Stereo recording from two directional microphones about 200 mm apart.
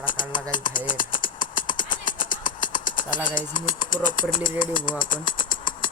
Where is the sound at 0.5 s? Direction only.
40° left (ahead or behind).